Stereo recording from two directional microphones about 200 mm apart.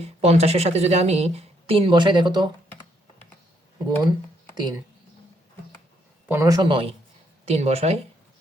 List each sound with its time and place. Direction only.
0.0 s speech: 30° right (ahead or behind)
4.5 s speech: 20° right (ahead or behind)
6.2 s a man's voice: 15° right (ahead or behind); by 7.9 s 30° right (ahead or behind)